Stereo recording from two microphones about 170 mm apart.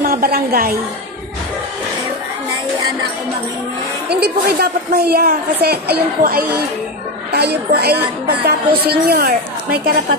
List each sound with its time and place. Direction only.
0.0 s a woman's voice: 60° right (ahead or behind)
4.1 s a woman's voice: 70° right (ahead or behind)